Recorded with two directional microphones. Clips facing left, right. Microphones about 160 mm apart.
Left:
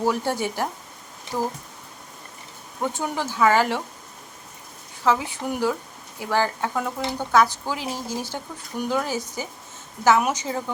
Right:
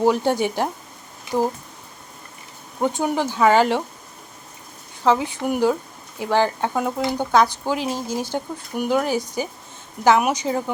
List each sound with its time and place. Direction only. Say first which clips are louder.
0.0 s speech: right 5 dB; 20° right (ahead or behind)
2.8 s speech: right 5 dB; 20° right (ahead or behind)
5.0 s speech: right 4 dB; 20° right (ahead or behind)